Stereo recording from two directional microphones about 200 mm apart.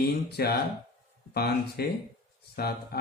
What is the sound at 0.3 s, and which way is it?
Speech, 50° left (ahead or behind).